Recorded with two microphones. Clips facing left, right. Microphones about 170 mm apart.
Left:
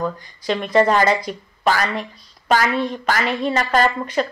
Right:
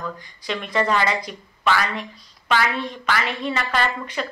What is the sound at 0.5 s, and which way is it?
A woman's voice, 40° left (ahead or behind).